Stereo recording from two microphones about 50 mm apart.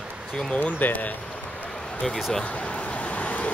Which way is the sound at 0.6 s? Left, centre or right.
Left.